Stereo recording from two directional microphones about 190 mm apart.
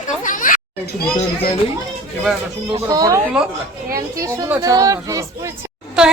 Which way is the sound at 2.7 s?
20° right (ahead or behind).